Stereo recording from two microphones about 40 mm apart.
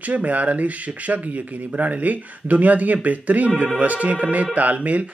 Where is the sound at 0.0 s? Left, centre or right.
Right.